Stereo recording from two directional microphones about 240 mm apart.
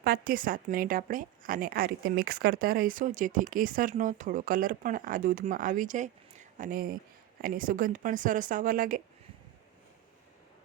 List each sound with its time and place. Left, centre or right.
0.0 s a woman's voice: right